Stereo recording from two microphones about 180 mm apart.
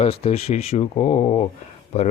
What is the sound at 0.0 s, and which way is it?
Speech, 35° left (ahead or behind).